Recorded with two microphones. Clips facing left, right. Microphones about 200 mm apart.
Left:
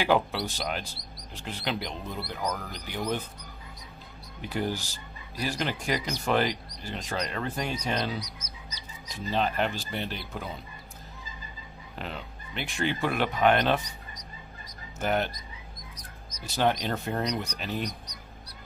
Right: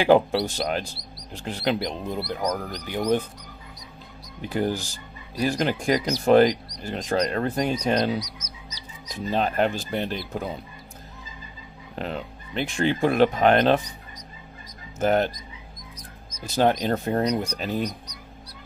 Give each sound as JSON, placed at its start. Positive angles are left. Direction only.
{"t": 0.0, "sound": "speech", "side_deg": -45}
{"t": 4.5, "sound": "speech", "side_deg": -50}
{"t": 11.9, "sound": "speech", "side_deg": -40}
{"t": 15.0, "sound": "speech", "side_deg": -45}
{"t": 16.3, "sound": "speech", "side_deg": -50}